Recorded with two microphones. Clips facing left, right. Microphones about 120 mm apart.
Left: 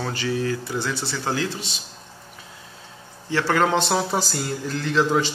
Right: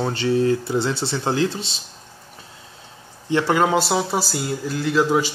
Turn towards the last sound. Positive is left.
turn(degrees=-10)  # may be behind; listen again after turning